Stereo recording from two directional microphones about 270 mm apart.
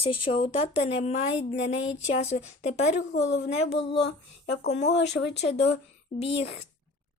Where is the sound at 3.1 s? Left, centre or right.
Left.